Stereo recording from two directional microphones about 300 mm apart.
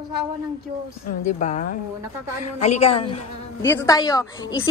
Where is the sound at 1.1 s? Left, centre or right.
Left.